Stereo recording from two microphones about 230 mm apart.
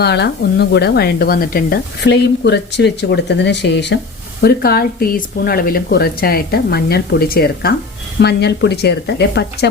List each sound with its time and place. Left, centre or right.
0.0 s speech: left